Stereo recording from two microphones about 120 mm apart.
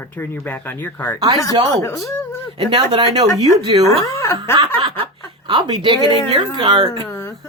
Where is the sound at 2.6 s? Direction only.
45° right (ahead or behind).